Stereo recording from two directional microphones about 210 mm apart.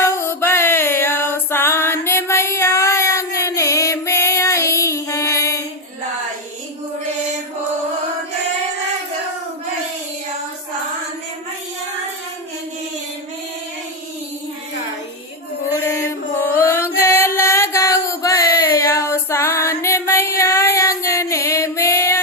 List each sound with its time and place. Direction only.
0.0 s music: 10° left (ahead or behind)
15.8 s mantra: 10° left (ahead or behind)